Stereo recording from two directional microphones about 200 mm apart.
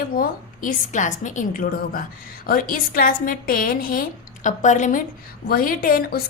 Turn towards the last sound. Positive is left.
turn(degrees=45)  # may be behind; listen again after turning